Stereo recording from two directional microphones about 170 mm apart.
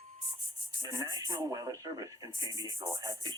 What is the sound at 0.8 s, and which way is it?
Speech, 20° right (ahead or behind).